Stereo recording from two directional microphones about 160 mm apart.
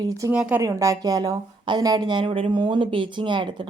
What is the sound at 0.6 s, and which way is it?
A woman's voice, 20° right (ahead or behind).